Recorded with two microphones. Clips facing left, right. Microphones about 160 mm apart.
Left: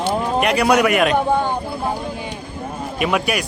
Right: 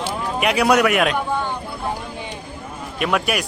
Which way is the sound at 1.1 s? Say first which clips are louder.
Left 5 dB; 50° left (ahead or behind).